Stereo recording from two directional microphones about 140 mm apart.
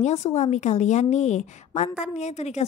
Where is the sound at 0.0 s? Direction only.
50° left (ahead or behind).